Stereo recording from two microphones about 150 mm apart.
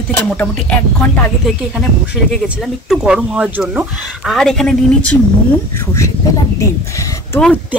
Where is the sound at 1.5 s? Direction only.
5° right (ahead or behind).